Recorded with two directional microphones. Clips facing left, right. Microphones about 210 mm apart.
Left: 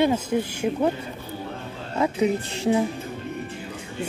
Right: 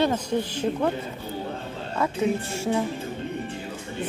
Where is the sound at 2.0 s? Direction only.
15° left (ahead or behind).